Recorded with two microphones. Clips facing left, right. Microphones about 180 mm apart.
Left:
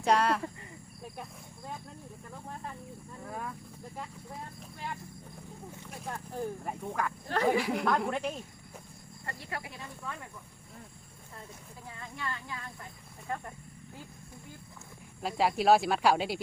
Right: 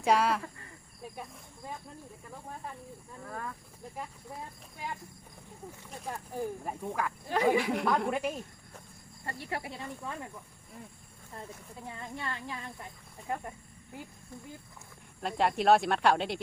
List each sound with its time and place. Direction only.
0.0 s speech: 5° right (ahead or behind)
3.2 s speech: 10° left (ahead or behind)
6.1 s speech: 10° right (ahead or behind)
7.6 s speech: centre (ahead or behind)
9.2 s speech: 25° right (ahead or behind)
11.9 s speech: 30° right (ahead or behind)
13.2 s speech: 15° right (ahead or behind)
15.2 s speech: 5° left (ahead or behind)